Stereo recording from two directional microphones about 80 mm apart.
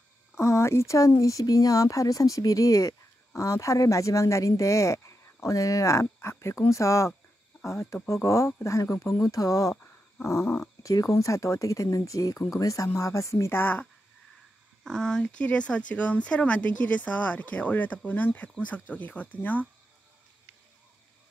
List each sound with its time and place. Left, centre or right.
0.4 s speech: left
14.8 s speech: centre